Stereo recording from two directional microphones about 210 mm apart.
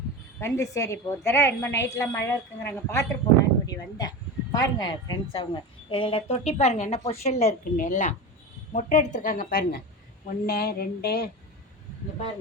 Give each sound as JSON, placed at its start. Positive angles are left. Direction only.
{"t": 0.3, "sound": "a woman's voice", "side_deg": 15}